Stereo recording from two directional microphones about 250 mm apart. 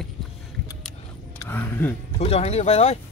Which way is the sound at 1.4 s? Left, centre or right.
Centre.